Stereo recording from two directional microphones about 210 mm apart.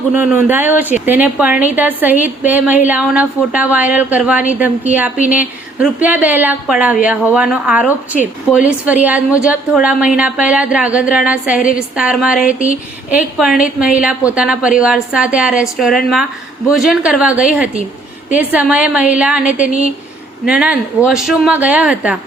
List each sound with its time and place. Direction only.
0.1 s a woman's voice: 10° right (ahead or behind)